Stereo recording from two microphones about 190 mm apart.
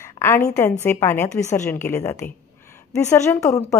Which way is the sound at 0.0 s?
15° left (ahead or behind).